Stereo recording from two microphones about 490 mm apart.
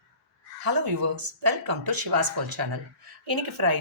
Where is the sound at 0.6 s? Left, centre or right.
Right.